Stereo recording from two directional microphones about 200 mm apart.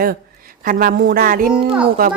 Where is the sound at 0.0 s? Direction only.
45° right (ahead or behind).